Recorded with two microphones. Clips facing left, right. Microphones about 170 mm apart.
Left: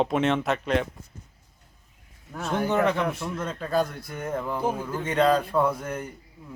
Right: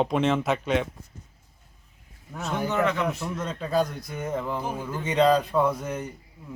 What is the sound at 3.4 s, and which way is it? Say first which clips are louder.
Speech: even; 5° left (ahead or behind).